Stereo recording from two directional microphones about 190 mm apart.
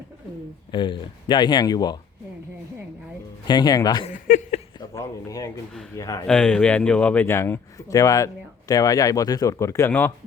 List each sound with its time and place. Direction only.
0.7 s speech: 25° left (ahead or behind)
3.4 s speech: 20° left (ahead or behind)
4.0 s a sound: 40° left (ahead or behind)
4.8 s a man's voice: 20° left (ahead or behind)
6.2 s speech: 5° left (ahead or behind)